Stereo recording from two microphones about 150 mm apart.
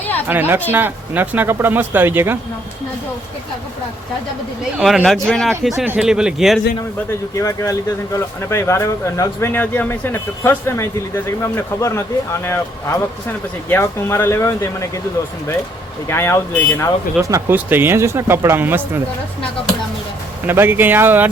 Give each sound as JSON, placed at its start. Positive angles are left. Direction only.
{"t": 0.0, "sound": "a sound", "side_deg": 10}
{"t": 0.3, "sound": "a man's voice", "side_deg": -15}
{"t": 4.8, "sound": "a man's voice", "side_deg": 0}
{"t": 5.8, "sound": "a man's voice", "side_deg": -5}
{"t": 7.3, "sound": "speech", "side_deg": 20}
{"t": 16.0, "sound": "speech", "side_deg": 15}
{"t": 17.2, "sound": "a man's voice", "side_deg": -15}
{"t": 20.5, "sound": "a man's voice", "side_deg": -15}